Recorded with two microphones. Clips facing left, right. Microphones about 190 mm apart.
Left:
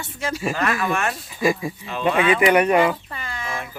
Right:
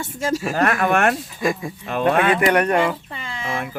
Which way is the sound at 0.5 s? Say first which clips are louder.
Right 6 dB; 55° right (ahead or behind).